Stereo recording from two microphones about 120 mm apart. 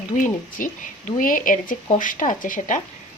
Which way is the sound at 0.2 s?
90° left.